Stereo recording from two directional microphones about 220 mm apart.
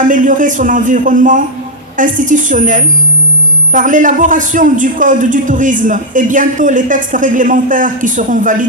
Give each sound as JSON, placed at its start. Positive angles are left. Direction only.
{"t": 0.0, "sound": "a man's voice", "side_deg": -35}